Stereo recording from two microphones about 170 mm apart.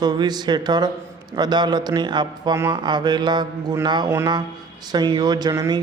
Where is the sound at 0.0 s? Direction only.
25° right (ahead or behind).